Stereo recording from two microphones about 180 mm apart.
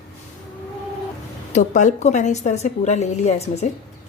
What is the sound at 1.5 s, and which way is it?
A woman's voice, 45° left (ahead or behind).